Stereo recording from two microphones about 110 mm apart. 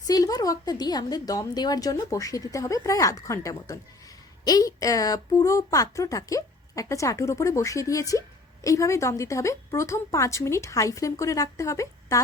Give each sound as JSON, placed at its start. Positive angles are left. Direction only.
{"t": 0.1, "sound": "a woman's voice", "side_deg": 35}